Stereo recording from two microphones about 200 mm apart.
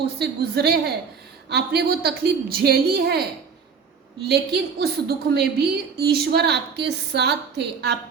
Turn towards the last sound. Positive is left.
turn(degrees=-55)  # may be behind; listen again after turning